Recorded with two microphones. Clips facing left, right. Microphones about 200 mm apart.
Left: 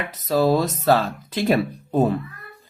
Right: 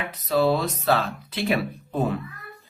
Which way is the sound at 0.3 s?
40° left (ahead or behind).